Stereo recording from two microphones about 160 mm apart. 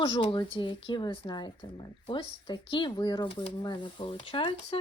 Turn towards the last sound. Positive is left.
turn(degrees=35)  # may be behind; listen again after turning